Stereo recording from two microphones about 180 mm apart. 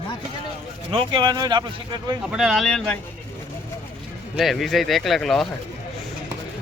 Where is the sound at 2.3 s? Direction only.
5° right (ahead or behind).